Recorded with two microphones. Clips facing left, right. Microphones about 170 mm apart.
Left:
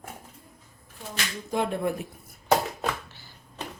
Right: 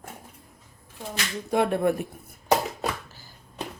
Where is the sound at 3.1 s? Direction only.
40° right (ahead or behind).